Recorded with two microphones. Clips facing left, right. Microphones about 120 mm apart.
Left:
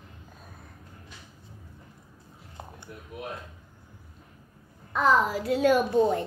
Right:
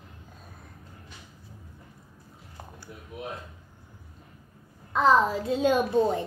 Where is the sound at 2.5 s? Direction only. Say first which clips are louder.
Left 1 dB; 25° left (ahead or behind).